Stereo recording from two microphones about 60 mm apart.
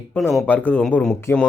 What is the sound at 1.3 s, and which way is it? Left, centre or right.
Speech, left.